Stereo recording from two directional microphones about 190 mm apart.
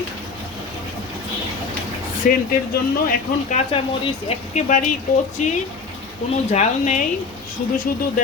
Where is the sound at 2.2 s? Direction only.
45° left (ahead or behind).